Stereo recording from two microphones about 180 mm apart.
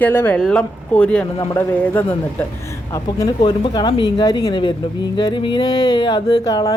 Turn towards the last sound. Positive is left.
turn(degrees=20)  # may be behind; listen again after turning